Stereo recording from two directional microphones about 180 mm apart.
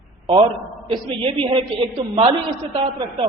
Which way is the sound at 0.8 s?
30° right (ahead or behind).